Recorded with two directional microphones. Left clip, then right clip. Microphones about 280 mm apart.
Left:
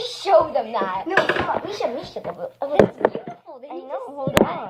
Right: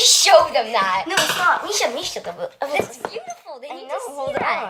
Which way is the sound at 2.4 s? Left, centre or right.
Right.